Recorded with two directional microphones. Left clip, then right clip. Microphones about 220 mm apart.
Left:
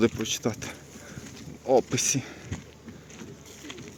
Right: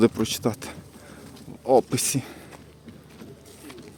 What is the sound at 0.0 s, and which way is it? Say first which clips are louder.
Speech: right 4 dB; 20° right (ahead or behind).